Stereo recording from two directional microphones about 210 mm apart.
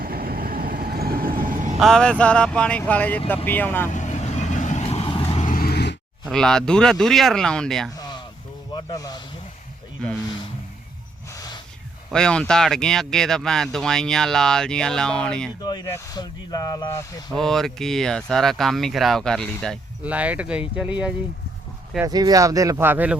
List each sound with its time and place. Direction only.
0.0 s vehicle: 45° right (ahead or behind)
1.8 s speech: 5° left (ahead or behind)
3.9 s vehicle: 35° left (ahead or behind); by 6.0 s 50° left (ahead or behind)
6.2 s speech: 5° left (ahead or behind)
7.9 s a sound: 20° left (ahead or behind)
8.7 s speech: 20° left (ahead or behind)
11.3 s a sound: 15° left (ahead or behind)
12.1 s speech: 5° left (ahead or behind)
15.6 s speech: 20° left (ahead or behind)
17.3 s speech: centre (ahead or behind)
21.9 s speech: 15° right (ahead or behind)